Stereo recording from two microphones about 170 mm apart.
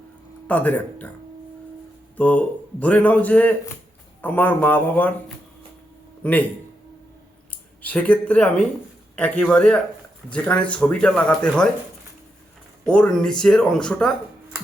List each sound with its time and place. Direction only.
0.4 s a man's voice: 10° left (ahead or behind)
2.1 s a man's voice: 10° left (ahead or behind)
6.2 s a man's voice: 10° left (ahead or behind)
7.8 s a man's voice: 10° left (ahead or behind)
12.8 s speech: 5° left (ahead or behind)